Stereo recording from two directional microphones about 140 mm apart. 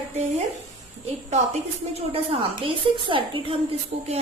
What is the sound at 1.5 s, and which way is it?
A woman's voice, 45° right (ahead or behind).